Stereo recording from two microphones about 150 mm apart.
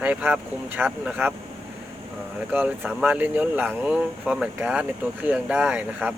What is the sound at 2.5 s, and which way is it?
Speech, 10° right (ahead or behind).